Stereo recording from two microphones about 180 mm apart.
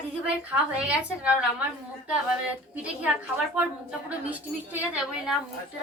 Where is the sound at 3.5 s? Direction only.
5° right (ahead or behind).